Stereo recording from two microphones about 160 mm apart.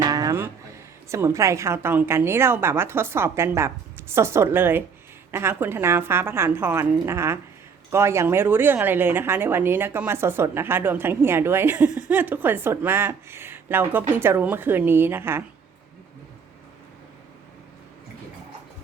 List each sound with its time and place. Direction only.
0.0 s music: 20° right (ahead or behind)
1.1 s a woman's voice: 20° right (ahead or behind)